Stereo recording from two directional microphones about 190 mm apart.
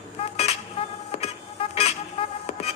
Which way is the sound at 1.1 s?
35° left (ahead or behind).